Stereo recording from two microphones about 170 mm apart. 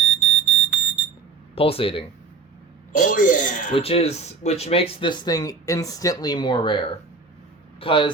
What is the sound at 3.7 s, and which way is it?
Speech, 35° left (ahead or behind).